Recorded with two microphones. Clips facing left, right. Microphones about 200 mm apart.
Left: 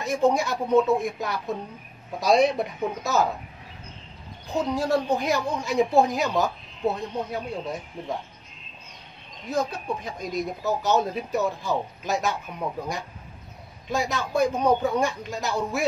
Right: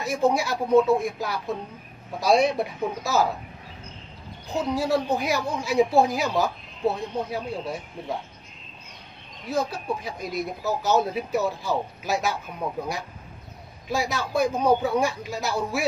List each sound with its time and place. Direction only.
0.0 s speech: 5° right (ahead or behind)
4.6 s speech: 5° right (ahead or behind)
9.6 s speech: 5° right (ahead or behind)
10.6 s speech: 15° left (ahead or behind)
10.9 s speech: 5° right (ahead or behind)